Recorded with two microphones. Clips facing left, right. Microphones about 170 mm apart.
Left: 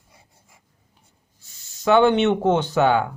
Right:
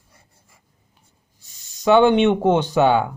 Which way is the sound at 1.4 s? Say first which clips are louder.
Even; 15° right (ahead or behind).